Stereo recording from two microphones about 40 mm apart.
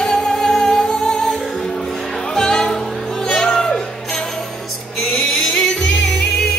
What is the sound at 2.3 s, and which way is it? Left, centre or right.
Music, centre.